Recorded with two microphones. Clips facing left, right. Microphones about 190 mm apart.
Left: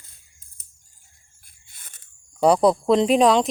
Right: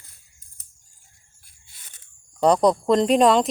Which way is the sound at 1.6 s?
50° left (ahead or behind).